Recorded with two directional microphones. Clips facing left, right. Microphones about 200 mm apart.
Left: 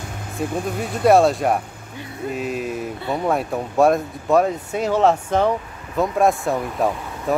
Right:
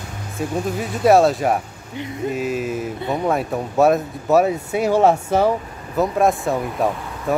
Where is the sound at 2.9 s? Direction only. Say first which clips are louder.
Right 1 dB; 20° right (ahead or behind).